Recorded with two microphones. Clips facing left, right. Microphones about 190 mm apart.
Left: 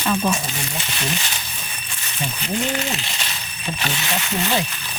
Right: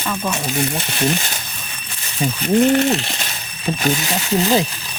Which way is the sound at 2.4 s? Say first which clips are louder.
Right 11 dB; 55° right (ahead or behind).